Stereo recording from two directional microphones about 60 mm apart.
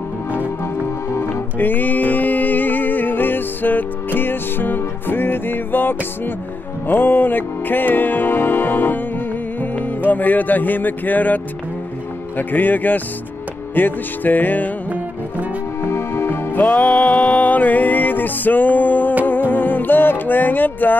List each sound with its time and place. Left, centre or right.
1.1 s music: left
1.6 s music: left
12.4 s speech: left
13.7 s music: left
15.8 s music: left
16.5 s music: left